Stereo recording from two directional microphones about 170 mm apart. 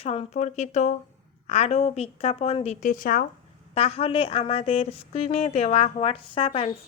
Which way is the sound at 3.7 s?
35° left (ahead or behind).